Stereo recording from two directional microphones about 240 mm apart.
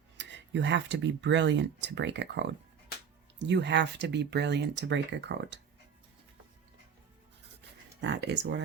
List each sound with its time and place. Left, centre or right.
0.2 s speech: right
8.0 s speech: right